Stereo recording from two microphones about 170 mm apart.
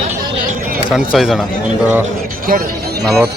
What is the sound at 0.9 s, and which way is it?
Speech, 5° right (ahead or behind).